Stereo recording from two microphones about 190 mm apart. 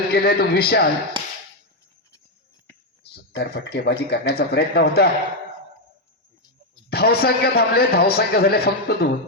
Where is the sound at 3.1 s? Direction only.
60° left (ahead or behind).